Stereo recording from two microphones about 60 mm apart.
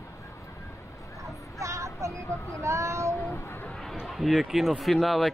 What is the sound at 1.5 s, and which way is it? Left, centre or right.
Child singing, right.